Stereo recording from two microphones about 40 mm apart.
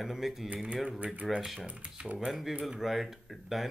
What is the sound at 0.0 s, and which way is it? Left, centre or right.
Speech, centre.